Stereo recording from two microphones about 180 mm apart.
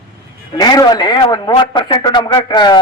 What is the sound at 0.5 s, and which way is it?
Speech, 20° left (ahead or behind).